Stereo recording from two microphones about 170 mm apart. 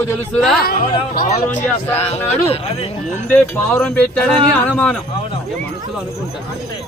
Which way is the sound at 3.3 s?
10° left (ahead or behind).